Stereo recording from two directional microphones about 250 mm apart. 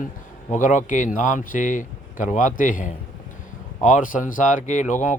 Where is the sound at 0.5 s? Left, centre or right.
Left.